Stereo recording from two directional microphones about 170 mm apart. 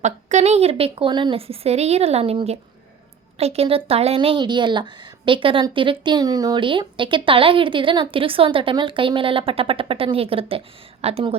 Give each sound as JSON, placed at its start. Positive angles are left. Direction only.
{"t": 0.0, "sound": "a woman's voice", "side_deg": -45}